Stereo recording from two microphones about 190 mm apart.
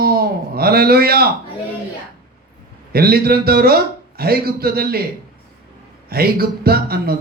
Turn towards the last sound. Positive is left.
turn(degrees=-55)  # may be behind; listen again after turning